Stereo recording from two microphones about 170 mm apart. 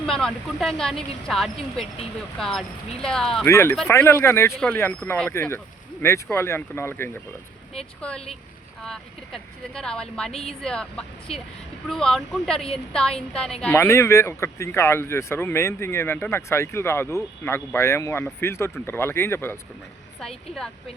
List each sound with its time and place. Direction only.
0.0 s speech: 5° left (ahead or behind)
3.4 s speech: 15° left (ahead or behind)
8.8 s speech: 5° left (ahead or behind)
11.3 s speech: 35° left (ahead or behind)
11.9 s speech: 5° left (ahead or behind)
13.7 s speech: 15° left (ahead or behind)
20.1 s speech: centre (ahead or behind)